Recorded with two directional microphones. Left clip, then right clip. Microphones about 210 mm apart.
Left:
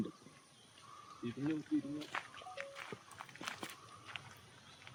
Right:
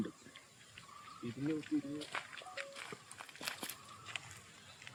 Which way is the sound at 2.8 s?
40° right (ahead or behind).